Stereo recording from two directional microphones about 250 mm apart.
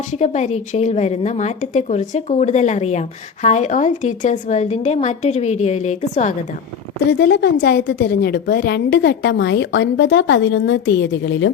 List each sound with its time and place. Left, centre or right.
0.1 s a woman's voice: left
7.1 s a woman's voice: left